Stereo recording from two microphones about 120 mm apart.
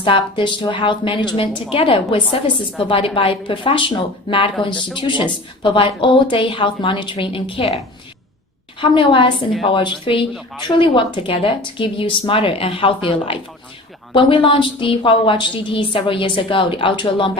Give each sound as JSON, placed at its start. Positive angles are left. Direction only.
{"t": 0.0, "sound": "a woman's voice", "side_deg": 45}
{"t": 8.8, "sound": "a woman's voice", "side_deg": 45}